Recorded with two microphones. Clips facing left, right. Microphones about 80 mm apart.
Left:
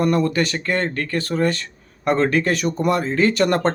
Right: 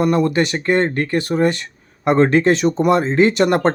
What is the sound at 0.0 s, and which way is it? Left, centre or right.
A man's voice, centre.